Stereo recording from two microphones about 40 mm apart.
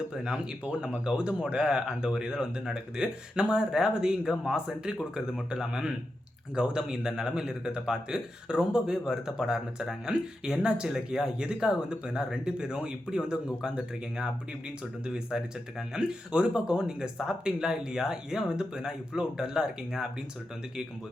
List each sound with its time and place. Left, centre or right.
0.1 s speech: centre
6.6 s speech: right
10.1 s speech: right